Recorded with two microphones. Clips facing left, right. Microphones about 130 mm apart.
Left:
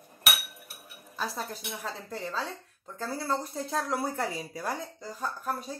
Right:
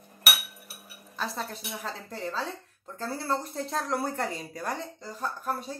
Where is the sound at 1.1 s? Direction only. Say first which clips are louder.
Right 1 dB; centre (ahead or behind).